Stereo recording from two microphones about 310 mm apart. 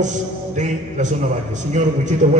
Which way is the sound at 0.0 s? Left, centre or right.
Right.